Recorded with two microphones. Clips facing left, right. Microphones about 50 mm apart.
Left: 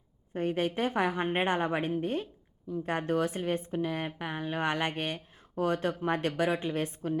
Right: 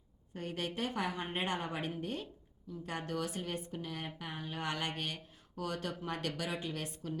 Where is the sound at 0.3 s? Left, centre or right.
Left.